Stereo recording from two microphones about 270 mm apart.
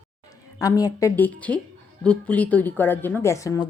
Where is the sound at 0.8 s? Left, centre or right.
Centre.